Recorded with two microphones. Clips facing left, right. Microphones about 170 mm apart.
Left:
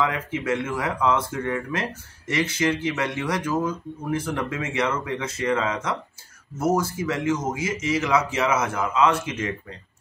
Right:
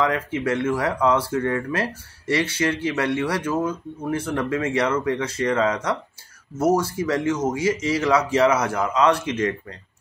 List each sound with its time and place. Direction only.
0.7 s speech: 35° right (ahead or behind)